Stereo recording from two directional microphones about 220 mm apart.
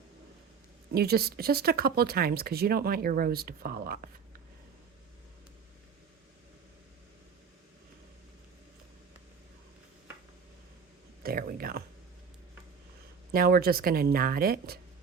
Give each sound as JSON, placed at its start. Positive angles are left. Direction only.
{"t": 0.9, "sound": "speech", "side_deg": -45}
{"t": 11.2, "sound": "whispering", "side_deg": -40}
{"t": 13.3, "sound": "speech", "side_deg": -40}